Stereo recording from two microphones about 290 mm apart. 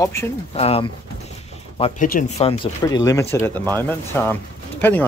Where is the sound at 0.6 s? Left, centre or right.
Centre.